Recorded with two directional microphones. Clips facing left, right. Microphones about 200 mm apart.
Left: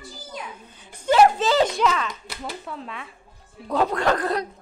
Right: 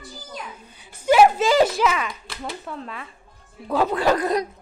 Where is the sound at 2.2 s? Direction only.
Centre (ahead or behind).